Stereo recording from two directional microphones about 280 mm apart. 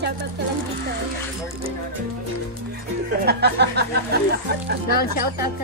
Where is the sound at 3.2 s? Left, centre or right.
Right.